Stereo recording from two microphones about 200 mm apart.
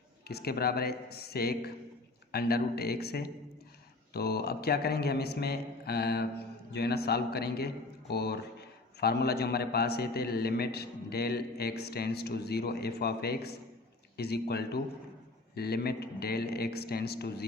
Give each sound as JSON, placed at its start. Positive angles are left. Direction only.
{"t": 0.3, "sound": "a man's voice", "side_deg": 50}